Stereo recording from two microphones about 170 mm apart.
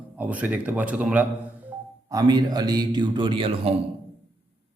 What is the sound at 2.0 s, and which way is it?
A man's voice, 25° right (ahead or behind).